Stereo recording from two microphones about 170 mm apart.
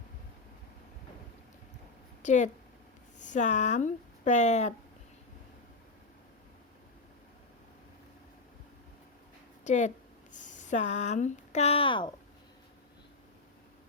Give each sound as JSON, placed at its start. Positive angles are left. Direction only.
{"t": 2.2, "sound": "speech", "side_deg": 45}
{"t": 9.6, "sound": "speech", "side_deg": 45}